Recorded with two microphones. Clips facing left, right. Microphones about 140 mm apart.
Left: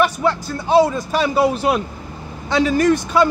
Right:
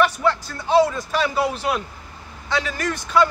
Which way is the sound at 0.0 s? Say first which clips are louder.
Left 2 dB; 10° left (ahead or behind).